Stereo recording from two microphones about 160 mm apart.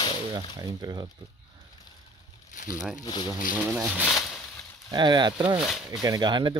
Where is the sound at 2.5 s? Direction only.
55° left (ahead or behind).